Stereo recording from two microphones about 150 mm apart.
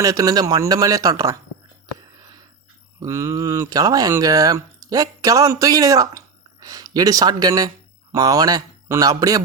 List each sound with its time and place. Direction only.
0.0 s speech: 25° right (ahead or behind)
3.0 s speech: 20° right (ahead or behind)